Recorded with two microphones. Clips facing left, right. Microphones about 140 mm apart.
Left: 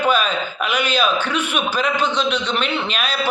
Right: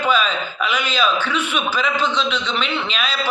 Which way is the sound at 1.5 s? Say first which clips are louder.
Left 1 dB; 10° left (ahead or behind).